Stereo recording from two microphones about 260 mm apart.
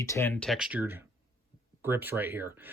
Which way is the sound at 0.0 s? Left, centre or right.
Centre.